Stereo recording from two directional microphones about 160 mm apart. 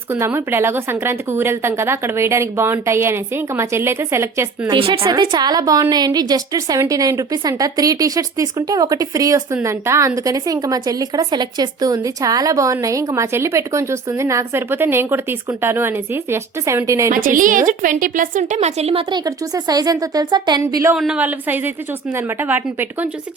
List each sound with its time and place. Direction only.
0.1 s a woman's voice: 15° right (ahead or behind)
4.7 s a woman's voice: 30° right (ahead or behind)
17.1 s a woman's voice: 60° right (ahead or behind); by 19.0 s 40° right (ahead or behind)
19.1 s a woman's voice: 25° right (ahead or behind)
20.9 s a woman's voice: 5° right (ahead or behind)